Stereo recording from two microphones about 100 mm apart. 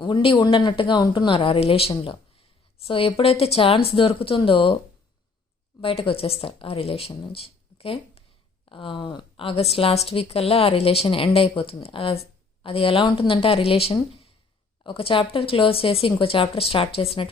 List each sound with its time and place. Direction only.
0.0 s speech: 55° left (ahead or behind)
0.3 s a woman's voice: 45° left (ahead or behind); by 4.8 s 60° left (ahead or behind)
5.8 s a woman's voice: 70° left (ahead or behind)
7.1 s speech: 65° left (ahead or behind)
8.7 s a woman's voice: 60° left (ahead or behind)
14.8 s a woman's voice: 65° left (ahead or behind)